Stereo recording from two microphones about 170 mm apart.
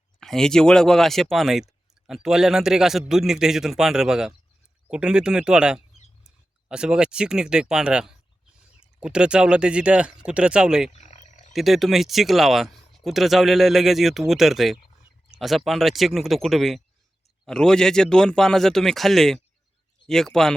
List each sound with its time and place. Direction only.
0.2 s speech: 5° left (ahead or behind)
10.9 s frog: 40° left (ahead or behind)
11.5 s speech: centre (ahead or behind)